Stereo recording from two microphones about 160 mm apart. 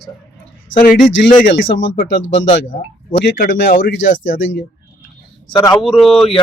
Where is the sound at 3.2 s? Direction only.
60° left (ahead or behind).